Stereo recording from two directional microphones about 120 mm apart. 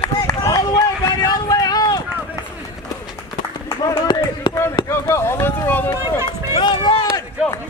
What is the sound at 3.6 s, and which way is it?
Run, 20° left (ahead or behind).